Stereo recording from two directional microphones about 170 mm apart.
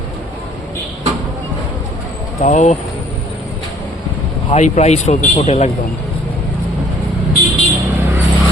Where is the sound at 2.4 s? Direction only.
45° left (ahead or behind).